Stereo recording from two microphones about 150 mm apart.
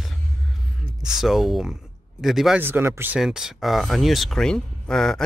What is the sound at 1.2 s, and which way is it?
Speech, centre (ahead or behind).